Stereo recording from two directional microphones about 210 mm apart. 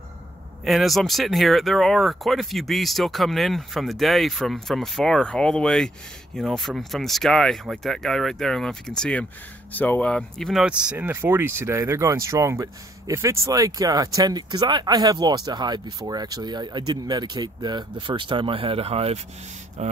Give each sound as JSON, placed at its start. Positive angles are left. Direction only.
{"t": 0.7, "sound": "speech", "side_deg": 0}